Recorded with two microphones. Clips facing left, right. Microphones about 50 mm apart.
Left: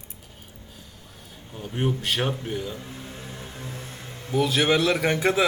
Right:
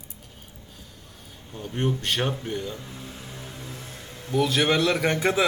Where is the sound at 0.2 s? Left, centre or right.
Centre.